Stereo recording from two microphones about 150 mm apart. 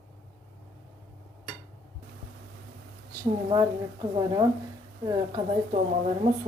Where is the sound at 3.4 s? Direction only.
30° right (ahead or behind).